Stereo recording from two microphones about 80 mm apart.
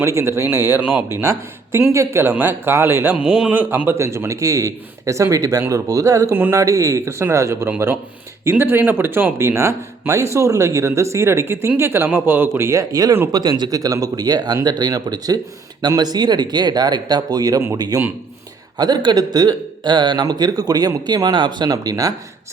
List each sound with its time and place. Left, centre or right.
0.0 s a man's voice: right
0.8 s speech: centre
1.1 s a man's voice: right
3.2 s a man's voice: centre
3.5 s a man's voice: right
6.3 s speech: right
6.6 s a man's voice: right
12.9 s speech: right
13.3 s speech: right
20.2 s speech: right